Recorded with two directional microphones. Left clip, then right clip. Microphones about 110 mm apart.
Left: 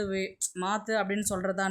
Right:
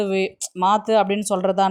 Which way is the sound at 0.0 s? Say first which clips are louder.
Right 10 dB; 50° right (ahead or behind).